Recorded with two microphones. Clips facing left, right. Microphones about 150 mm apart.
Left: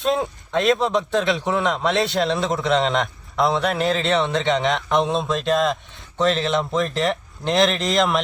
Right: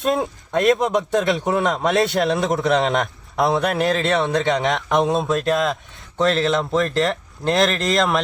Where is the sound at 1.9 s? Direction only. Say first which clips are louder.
Right 4 dB; centre (ahead or behind).